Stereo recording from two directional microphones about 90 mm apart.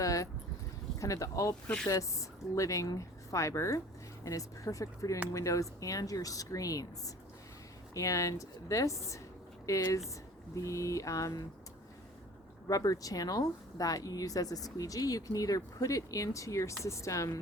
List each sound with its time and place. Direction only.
0.0 s speech: 40° left (ahead or behind)
1.6 s speech: 10° left (ahead or behind)
1.9 s speech: 35° left (ahead or behind)
7.9 s speech: 35° left (ahead or behind)
12.6 s speech: 40° left (ahead or behind)